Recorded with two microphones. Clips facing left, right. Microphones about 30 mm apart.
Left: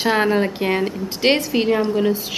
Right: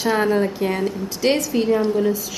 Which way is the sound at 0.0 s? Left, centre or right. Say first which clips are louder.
Left 1 dB; left.